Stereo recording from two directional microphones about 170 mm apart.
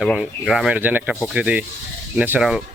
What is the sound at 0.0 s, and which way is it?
Speech, centre (ahead or behind).